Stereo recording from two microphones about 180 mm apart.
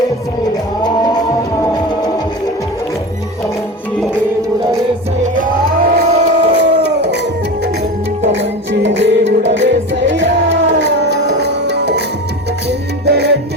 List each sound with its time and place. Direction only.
5.2 s music: 50° right (ahead or behind)
6.1 s howl: 35° right (ahead or behind)
6.8 s howl: 70° right (ahead or behind)
8.4 s music: 80° right
10.8 s music: 75° right (ahead or behind)